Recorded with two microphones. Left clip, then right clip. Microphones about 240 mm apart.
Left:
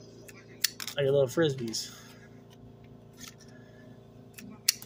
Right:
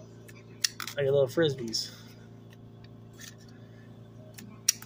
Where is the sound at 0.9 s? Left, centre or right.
Centre.